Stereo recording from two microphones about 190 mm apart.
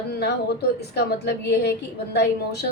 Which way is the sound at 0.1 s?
55° left (ahead or behind).